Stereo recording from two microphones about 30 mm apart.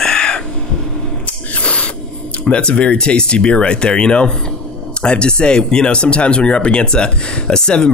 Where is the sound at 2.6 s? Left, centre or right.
Left.